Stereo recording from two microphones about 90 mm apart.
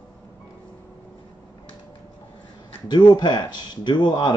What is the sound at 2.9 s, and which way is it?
Speech, 55° left (ahead or behind).